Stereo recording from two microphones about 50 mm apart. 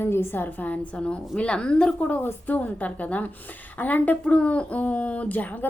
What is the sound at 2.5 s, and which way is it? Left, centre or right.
Speech, left.